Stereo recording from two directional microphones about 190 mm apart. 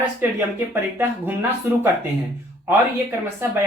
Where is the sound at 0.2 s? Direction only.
10° right (ahead or behind).